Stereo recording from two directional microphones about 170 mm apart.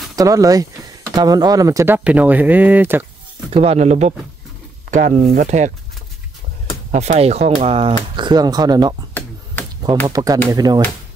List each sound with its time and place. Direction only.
0.1 s speech: 20° right (ahead or behind)
2.0 s speech: 10° right (ahead or behind)
3.4 s speech: 35° right (ahead or behind)
6.9 s speech: 40° right (ahead or behind); by 8.9 s 25° right (ahead or behind)
10.0 s speech: 20° right (ahead or behind)